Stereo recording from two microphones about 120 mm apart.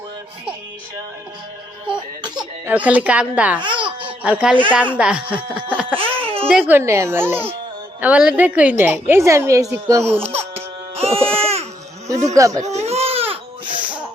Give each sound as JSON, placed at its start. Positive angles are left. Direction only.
{"t": 1.9, "sound": "cough", "side_deg": -40}
{"t": 2.6, "sound": "a woman's voice", "side_deg": -15}
{"t": 3.6, "sound": "baby laughter", "side_deg": -45}
{"t": 4.2, "sound": "a woman's voice", "side_deg": -10}
{"t": 6.2, "sound": "a sound", "side_deg": -50}
{"t": 6.7, "sound": "a woman's voice", "side_deg": -20}
{"t": 10.2, "sound": "baby cry", "side_deg": -60}
{"t": 12.0, "sound": "speech", "side_deg": -25}
{"t": 12.6, "sound": "baby cry", "side_deg": -65}